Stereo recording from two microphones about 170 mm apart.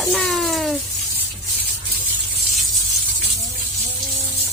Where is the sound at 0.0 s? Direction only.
Centre (ahead or behind).